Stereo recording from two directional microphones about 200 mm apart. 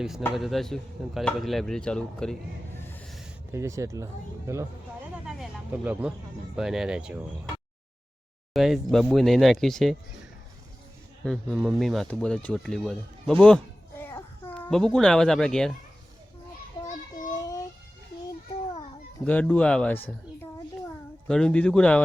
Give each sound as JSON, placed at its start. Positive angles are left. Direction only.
{"t": 0.3, "sound": "speech", "side_deg": 0}
{"t": 2.7, "sound": "a sound", "side_deg": 10}
{"t": 3.5, "sound": "speech", "side_deg": -15}
{"t": 5.2, "sound": "vehicle", "side_deg": -5}
{"t": 6.6, "sound": "speech", "side_deg": 0}
{"t": 8.5, "sound": "speech", "side_deg": 0}
{"t": 11.3, "sound": "speech", "side_deg": 0}
{"t": 14.0, "sound": "a sound", "side_deg": 10}
{"t": 17.4, "sound": "a sound", "side_deg": 15}
{"t": 19.2, "sound": "a child's voice", "side_deg": 5}